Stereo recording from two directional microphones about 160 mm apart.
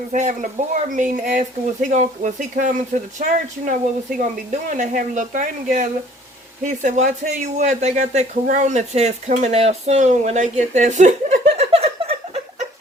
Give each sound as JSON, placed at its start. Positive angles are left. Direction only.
{"t": 0.1, "sound": "speech", "side_deg": -55}